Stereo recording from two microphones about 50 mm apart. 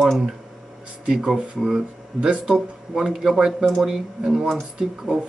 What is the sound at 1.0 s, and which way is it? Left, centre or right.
Speech, centre.